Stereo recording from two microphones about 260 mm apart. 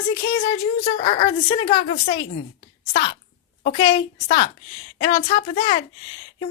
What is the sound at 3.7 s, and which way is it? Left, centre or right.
A woman's voice, centre.